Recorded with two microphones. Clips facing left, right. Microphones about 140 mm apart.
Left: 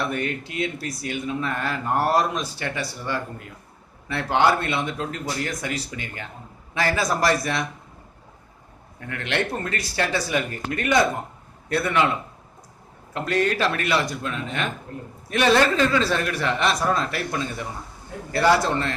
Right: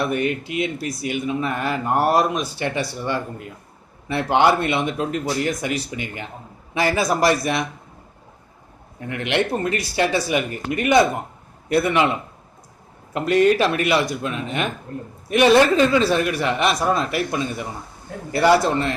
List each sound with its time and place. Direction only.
0.0 s speech: 15° right (ahead or behind)
9.0 s speech: 20° right (ahead or behind)
13.1 s speech: 15° right (ahead or behind)